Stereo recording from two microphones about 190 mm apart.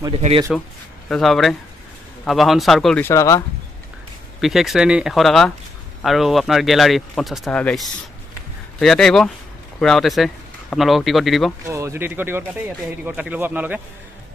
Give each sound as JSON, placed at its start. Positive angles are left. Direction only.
{"t": 1.0, "sound": "speech", "side_deg": 5}
{"t": 3.1, "sound": "speech", "side_deg": 15}
{"t": 4.4, "sound": "speech", "side_deg": 0}
{"t": 11.6, "sound": "speech", "side_deg": -15}